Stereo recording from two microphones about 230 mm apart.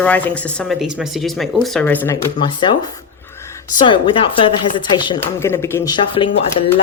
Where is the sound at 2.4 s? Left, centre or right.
Left.